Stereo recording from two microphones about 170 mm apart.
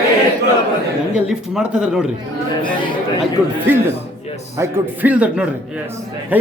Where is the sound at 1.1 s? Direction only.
5° right (ahead or behind).